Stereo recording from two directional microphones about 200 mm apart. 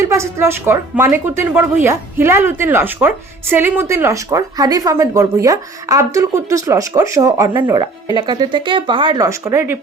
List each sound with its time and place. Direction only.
0.0 s a woman's voice: 15° right (ahead or behind)